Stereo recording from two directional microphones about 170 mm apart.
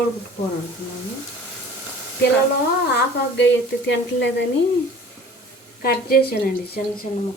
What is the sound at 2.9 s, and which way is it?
Sizzle, 90° left.